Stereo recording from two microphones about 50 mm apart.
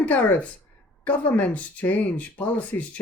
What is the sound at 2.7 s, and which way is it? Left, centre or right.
Speech, left.